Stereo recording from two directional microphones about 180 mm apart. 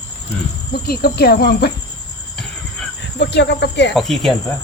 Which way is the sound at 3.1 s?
75° left (ahead or behind).